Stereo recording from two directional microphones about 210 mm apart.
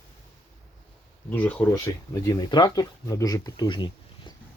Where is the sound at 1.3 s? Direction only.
5° left (ahead or behind).